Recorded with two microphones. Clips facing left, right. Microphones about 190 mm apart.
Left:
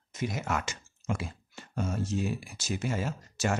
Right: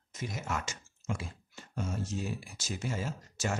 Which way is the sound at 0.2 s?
70° left (ahead or behind).